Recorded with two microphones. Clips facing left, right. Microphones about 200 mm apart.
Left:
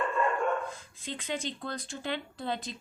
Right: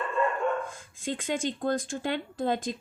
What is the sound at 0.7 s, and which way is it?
Speech, 45° right (ahead or behind).